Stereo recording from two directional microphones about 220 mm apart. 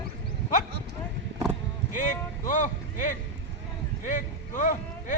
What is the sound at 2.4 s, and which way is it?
Speech, 35° left (ahead or behind).